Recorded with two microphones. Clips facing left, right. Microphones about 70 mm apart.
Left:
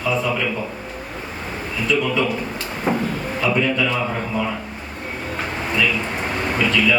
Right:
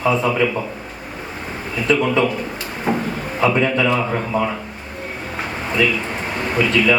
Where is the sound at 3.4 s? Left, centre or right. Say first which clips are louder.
Right 3 dB; right.